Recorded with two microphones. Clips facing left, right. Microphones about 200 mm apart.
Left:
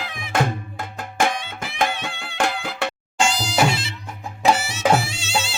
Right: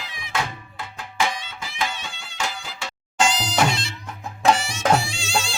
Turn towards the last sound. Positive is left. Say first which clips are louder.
# left 1 dB
turn(degrees=5)  # may be behind; listen again after turning